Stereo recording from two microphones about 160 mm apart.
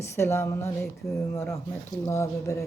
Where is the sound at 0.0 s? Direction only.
15° left (ahead or behind).